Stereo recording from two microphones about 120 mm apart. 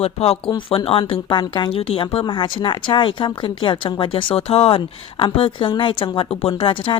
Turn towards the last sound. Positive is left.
turn(degrees=45)  # may be behind; listen again after turning